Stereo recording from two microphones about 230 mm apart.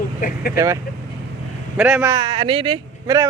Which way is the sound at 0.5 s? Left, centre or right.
Centre.